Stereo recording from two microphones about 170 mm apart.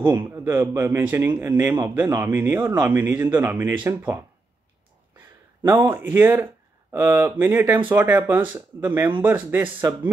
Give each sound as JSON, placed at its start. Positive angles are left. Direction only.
{"t": 0.1, "sound": "a man's voice", "side_deg": -25}
{"t": 0.4, "sound": "a man's voice", "side_deg": -10}
{"t": 5.7, "sound": "a man's voice", "side_deg": -10}